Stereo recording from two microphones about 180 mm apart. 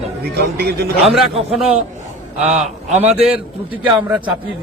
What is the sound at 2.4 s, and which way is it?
Speech, 40° right (ahead or behind).